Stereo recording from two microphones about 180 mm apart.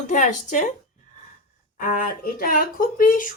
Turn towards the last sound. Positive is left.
turn(degrees=50)  # may be behind; listen again after turning